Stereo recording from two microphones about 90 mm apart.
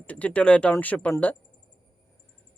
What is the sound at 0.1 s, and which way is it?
Speech, 15° left (ahead or behind).